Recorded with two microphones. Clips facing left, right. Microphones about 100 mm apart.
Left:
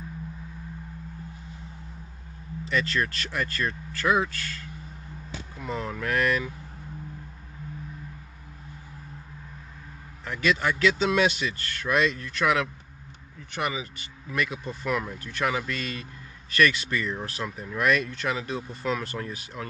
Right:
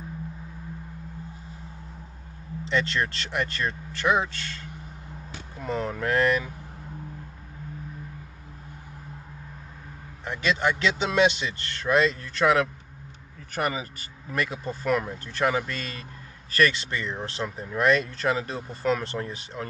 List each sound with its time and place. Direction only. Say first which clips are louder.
2.6 s speech: right 1 dB; 25° right (ahead or behind)
5.7 s speech: right 3 dB; 30° right (ahead or behind)
10.2 s speech: even; 25° right (ahead or behind)